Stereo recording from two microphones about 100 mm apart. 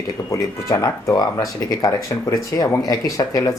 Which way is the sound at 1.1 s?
40° left (ahead or behind).